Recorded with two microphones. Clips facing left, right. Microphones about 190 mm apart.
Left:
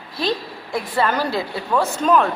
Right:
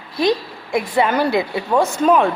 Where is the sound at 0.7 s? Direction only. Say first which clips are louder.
Right 4 dB; 15° right (ahead or behind).